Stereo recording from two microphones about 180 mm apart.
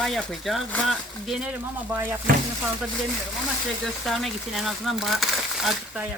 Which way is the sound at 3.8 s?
Centre (ahead or behind).